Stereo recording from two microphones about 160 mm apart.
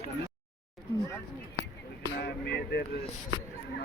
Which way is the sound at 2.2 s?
90° left.